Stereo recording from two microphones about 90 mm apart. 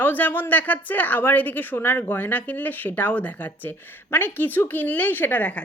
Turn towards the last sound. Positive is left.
turn(degrees=15)  # may be behind; listen again after turning